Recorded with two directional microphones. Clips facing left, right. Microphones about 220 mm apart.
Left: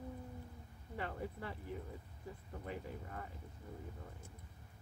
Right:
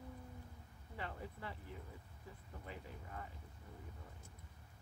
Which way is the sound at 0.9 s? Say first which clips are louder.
Left 5 dB; 45° left (ahead or behind).